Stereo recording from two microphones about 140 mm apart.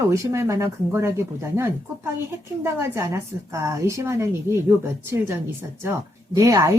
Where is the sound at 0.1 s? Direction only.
20° right (ahead or behind).